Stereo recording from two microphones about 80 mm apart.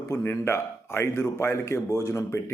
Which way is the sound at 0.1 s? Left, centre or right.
Left.